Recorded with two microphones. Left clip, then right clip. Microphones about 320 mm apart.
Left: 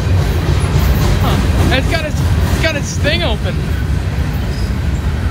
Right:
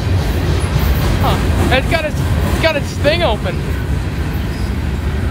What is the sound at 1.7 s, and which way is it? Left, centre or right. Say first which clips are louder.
Speech: right 2 dB; right.